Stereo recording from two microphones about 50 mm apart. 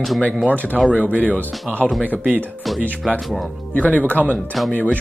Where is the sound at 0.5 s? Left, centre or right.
Left.